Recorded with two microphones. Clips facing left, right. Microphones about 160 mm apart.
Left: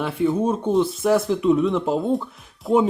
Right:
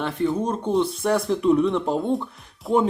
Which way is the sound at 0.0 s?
5° left (ahead or behind).